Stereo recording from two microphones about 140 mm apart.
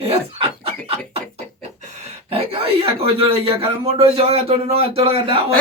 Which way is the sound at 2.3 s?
40° right (ahead or behind).